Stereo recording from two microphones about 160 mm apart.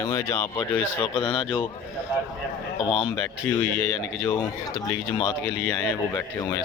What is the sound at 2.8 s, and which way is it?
Speech, 35° left (ahead or behind).